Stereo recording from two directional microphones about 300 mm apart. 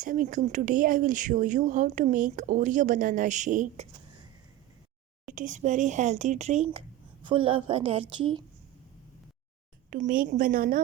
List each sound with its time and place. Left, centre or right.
0.0 s speech: right
5.3 s a woman's voice: right
9.9 s speech: right